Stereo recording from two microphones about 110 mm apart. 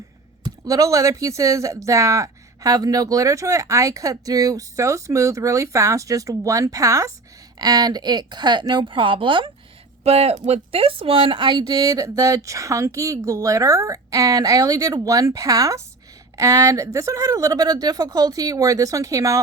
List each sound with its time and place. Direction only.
0.6 s a woman's voice: 30° right (ahead or behind); by 9.5 s 50° right (ahead or behind)
10.0 s speech: 70° right (ahead or behind); by 19.4 s 30° right (ahead or behind)